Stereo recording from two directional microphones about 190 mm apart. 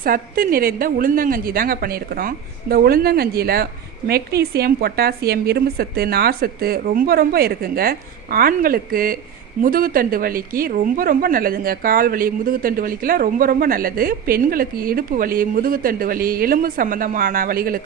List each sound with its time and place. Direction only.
0.0 s a woman's voice: 50° right (ahead or behind)